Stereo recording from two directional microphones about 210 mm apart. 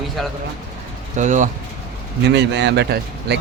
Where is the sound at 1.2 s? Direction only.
35° right (ahead or behind).